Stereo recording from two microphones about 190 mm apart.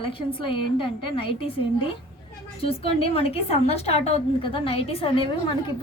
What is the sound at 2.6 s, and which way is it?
A woman's voice, 30° left (ahead or behind).